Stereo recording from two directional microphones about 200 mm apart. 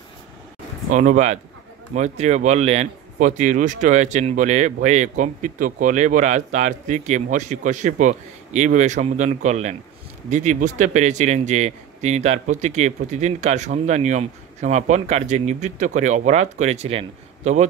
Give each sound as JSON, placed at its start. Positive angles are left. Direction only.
{"t": 0.9, "sound": "speech", "side_deg": -40}